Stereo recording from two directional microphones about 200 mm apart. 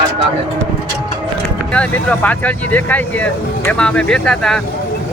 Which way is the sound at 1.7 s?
5° left (ahead or behind).